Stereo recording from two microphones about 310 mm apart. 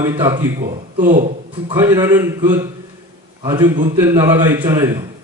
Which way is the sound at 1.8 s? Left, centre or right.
Centre.